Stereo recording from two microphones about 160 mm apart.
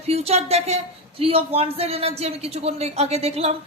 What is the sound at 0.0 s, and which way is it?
A woman's voice, 40° right (ahead or behind).